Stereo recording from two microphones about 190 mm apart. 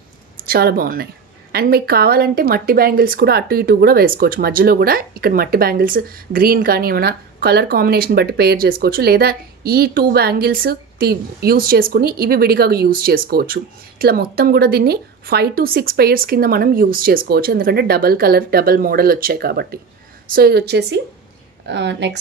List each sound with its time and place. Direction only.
0.5 s a woman's voice: 55° right (ahead or behind)